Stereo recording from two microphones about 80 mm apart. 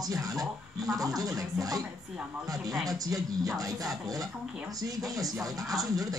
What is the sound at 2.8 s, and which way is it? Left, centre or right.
Speech, right.